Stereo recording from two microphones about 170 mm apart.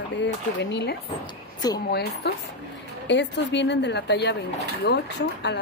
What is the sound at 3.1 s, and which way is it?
Speech, 90° left.